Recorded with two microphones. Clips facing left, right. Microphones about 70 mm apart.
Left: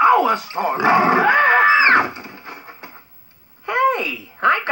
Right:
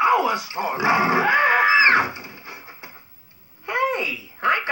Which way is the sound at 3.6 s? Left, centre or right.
Left.